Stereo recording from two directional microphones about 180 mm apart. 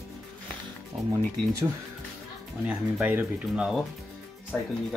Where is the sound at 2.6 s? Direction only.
10° right (ahead or behind).